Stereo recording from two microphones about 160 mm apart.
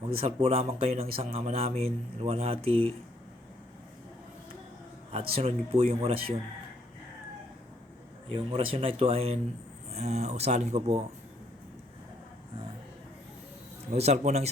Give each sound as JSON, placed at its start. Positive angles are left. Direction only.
{"t": 0.1, "sound": "speech", "side_deg": -35}
{"t": 5.3, "sound": "speech", "side_deg": -40}
{"t": 8.5, "sound": "speech", "side_deg": -35}
{"t": 13.9, "sound": "speech", "side_deg": -40}